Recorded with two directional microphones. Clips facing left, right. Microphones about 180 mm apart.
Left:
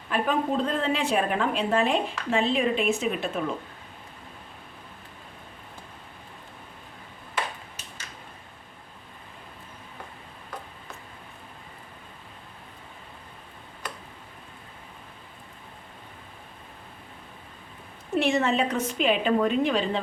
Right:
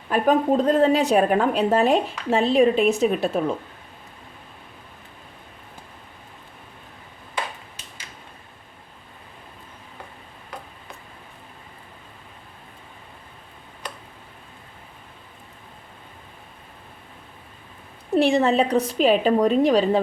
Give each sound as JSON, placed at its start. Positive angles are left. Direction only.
{"t": 0.1, "sound": "a woman's voice", "side_deg": -40}
{"t": 18.1, "sound": "a woman's voice", "side_deg": -35}